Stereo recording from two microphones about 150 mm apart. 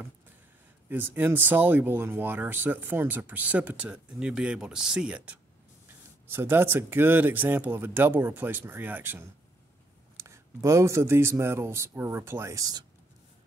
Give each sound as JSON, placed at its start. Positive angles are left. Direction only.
{"t": 0.8, "sound": "speech", "side_deg": -15}
{"t": 6.3, "sound": "speech", "side_deg": -15}